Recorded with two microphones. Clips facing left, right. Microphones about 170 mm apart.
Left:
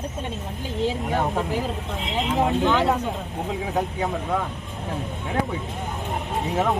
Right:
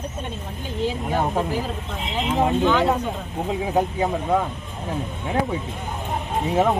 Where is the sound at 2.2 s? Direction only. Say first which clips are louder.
Right 2 dB; centre (ahead or behind).